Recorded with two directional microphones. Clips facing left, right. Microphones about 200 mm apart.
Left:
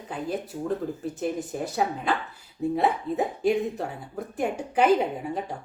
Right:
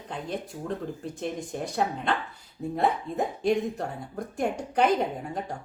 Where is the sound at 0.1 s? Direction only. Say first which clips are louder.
Left 3 dB; 5° left (ahead or behind).